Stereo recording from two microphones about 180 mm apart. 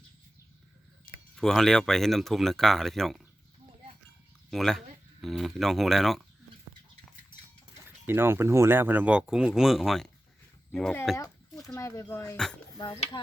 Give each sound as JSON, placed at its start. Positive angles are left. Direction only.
{"t": 1.4, "sound": "speech", "side_deg": 5}
{"t": 4.5, "sound": "speech", "side_deg": 0}
{"t": 7.9, "sound": "speech", "side_deg": -10}
{"t": 11.2, "sound": "a sound", "side_deg": 20}
{"t": 11.7, "sound": "speech", "side_deg": 15}